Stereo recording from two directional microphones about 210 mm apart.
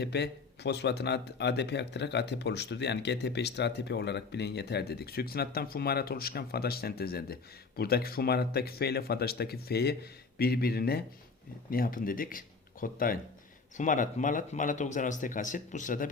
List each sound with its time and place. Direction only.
0.0 s speech: 50° left (ahead or behind)